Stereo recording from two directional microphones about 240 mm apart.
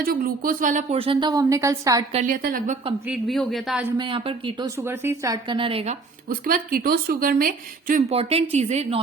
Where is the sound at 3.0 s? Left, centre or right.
Centre.